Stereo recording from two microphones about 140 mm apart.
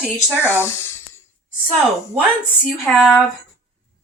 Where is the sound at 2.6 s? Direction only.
Centre (ahead or behind).